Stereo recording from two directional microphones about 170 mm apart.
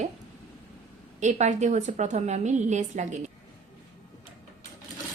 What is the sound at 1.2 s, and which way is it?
A woman's voice, 45° right (ahead or behind).